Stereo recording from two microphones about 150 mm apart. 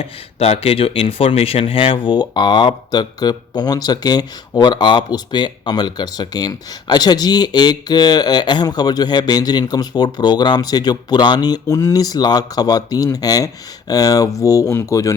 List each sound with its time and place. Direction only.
0.0 s speech: 40° left (ahead or behind); by 15.1 s 20° left (ahead or behind)